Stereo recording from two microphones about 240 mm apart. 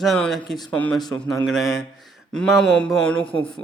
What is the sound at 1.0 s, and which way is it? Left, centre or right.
Speech, centre.